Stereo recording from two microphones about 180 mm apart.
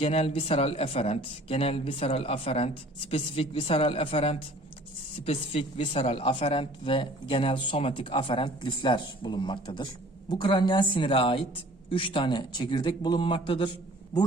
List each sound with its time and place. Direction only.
0.0 s a woman's voice: 35° left (ahead or behind)